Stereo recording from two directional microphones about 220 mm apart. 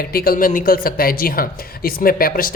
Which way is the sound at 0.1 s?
40° left (ahead or behind).